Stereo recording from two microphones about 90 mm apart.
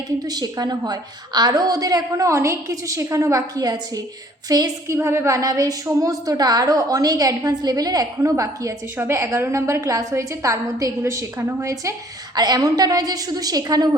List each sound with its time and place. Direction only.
0.3 s a woman's voice: 50° right (ahead or behind)
4.9 s a woman's voice: 30° right (ahead or behind)
12.4 s a woman's voice: 45° right (ahead or behind)